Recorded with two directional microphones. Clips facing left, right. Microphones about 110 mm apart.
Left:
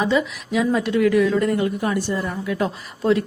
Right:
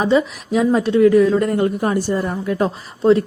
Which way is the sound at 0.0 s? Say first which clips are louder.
Right 4 dB; 35° right (ahead or behind).